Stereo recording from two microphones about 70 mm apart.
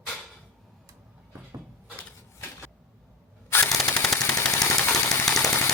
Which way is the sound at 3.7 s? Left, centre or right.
Left.